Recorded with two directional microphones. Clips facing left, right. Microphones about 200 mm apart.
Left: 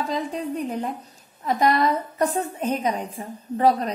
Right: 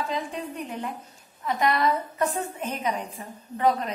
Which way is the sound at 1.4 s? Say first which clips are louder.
Left 3 dB; 40° left (ahead or behind).